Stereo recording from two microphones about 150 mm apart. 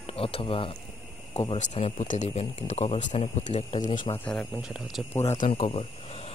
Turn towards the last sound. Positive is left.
turn(degrees=40)  # may be behind; listen again after turning